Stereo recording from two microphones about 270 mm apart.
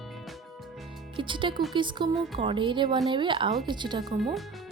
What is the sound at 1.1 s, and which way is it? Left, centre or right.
Speech, centre.